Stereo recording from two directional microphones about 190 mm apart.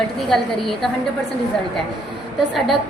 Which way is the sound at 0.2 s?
Centre (ahead or behind).